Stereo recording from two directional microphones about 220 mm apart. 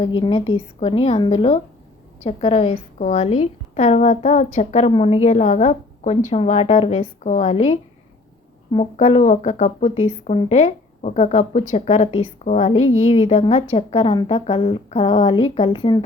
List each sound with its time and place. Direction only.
0.2 s speech: 25° left (ahead or behind)